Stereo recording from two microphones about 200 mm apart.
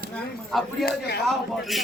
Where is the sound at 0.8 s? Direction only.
55° left (ahead or behind).